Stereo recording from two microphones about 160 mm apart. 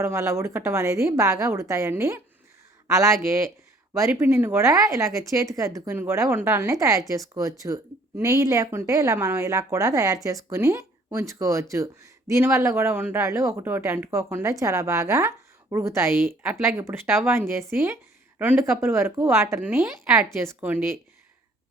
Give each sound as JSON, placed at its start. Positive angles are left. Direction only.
{"t": 0.0, "sound": "a woman's voice", "side_deg": -20}